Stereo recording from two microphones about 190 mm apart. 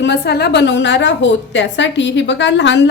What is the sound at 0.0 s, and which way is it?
A woman's voice, 65° left (ahead or behind).